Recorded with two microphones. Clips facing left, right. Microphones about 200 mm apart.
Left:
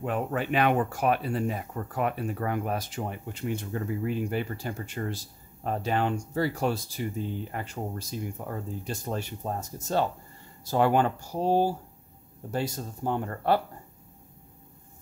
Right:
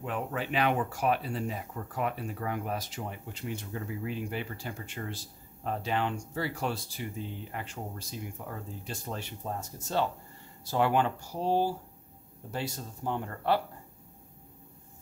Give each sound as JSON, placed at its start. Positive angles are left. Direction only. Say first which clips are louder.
{"t": 0.0, "sound": "speech", "louder": "left 5 dB", "side_deg": 50}